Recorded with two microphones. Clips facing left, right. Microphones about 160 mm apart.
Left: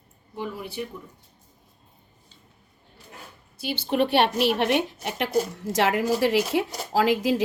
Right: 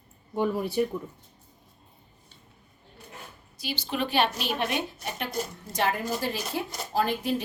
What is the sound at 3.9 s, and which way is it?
A woman's voice, 65° left (ahead or behind).